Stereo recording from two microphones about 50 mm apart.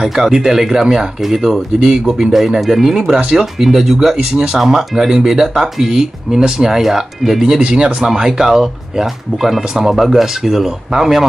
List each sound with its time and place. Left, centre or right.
0.0 s speech: centre
7.6 s speech: centre